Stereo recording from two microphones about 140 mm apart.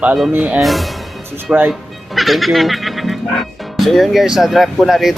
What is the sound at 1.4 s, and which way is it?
Speech, 10° right (ahead or behind).